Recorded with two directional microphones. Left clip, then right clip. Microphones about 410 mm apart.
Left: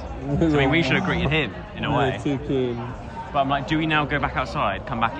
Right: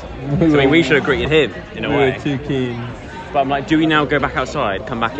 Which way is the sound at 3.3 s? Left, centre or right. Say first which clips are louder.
Right 6 dB; centre.